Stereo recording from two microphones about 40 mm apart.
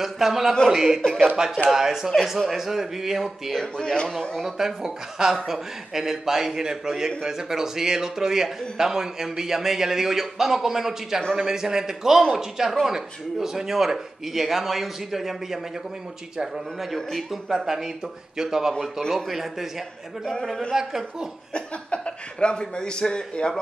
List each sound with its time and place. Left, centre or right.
0.0 s a man's voice: centre
3.7 s a man's voice: left
4.4 s a man's voice: centre
16.9 s a man's voice: centre
17.5 s a man's voice: centre
20.7 s a man's voice: centre
21.5 s a man's voice: left